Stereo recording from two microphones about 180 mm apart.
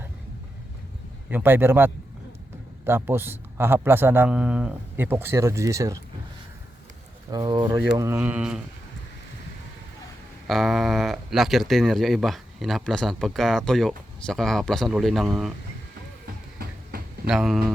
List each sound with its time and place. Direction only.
1.3 s a man's voice: 10° right (ahead or behind)
7.3 s a man's voice: 20° right (ahead or behind); by 8.6 s 5° right (ahead or behind)
10.4 s speech: centre (ahead or behind)
17.2 s speech: centre (ahead or behind)